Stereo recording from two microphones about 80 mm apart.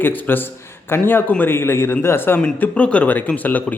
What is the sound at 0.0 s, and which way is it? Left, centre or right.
A man's voice, left.